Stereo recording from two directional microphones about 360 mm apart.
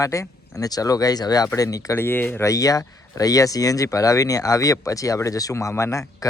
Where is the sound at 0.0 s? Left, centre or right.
Centre.